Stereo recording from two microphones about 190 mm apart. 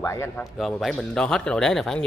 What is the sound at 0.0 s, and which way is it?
Speech, 15° left (ahead or behind).